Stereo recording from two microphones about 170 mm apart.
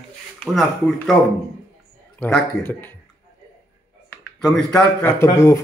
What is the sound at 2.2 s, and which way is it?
Speech, 10° left (ahead or behind).